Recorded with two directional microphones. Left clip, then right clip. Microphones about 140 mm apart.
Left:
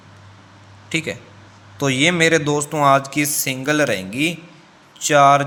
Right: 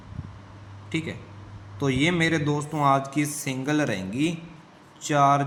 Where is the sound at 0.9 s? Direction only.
35° left (ahead or behind).